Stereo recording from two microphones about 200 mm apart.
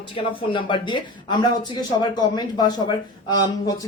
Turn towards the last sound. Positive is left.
turn(degrees=20)  # may be behind; listen again after turning